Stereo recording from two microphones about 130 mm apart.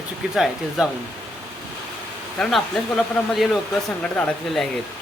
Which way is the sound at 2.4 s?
Centre (ahead or behind).